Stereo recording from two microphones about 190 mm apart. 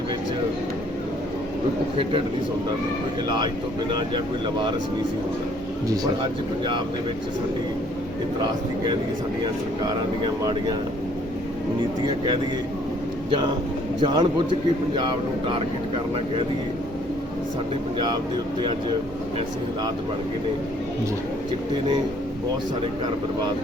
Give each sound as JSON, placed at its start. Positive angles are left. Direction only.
{"t": 3.2, "sound": "a man's voice", "side_deg": -20}
{"t": 12.0, "sound": "a man's voice", "side_deg": -25}
{"t": 14.0, "sound": "a man's voice", "side_deg": -25}